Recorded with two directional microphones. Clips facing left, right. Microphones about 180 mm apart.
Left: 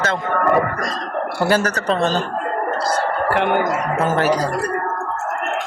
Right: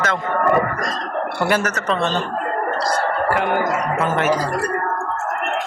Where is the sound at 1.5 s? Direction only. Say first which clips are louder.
Left 3 dB; 35° left (ahead or behind).